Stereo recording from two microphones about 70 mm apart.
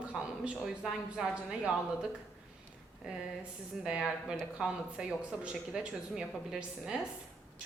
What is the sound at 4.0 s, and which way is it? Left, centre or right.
A woman's voice, centre.